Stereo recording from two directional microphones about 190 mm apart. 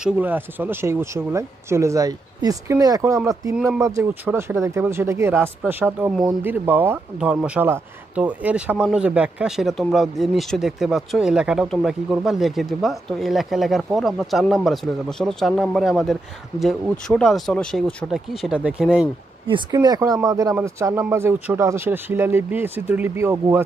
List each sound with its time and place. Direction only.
0.0 s speech: 10° right (ahead or behind)
19.4 s speech: 25° right (ahead or behind)